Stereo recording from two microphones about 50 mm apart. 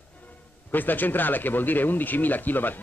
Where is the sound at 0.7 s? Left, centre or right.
Left.